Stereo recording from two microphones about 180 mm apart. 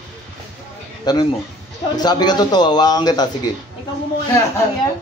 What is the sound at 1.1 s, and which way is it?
A man's voice, 20° left (ahead or behind).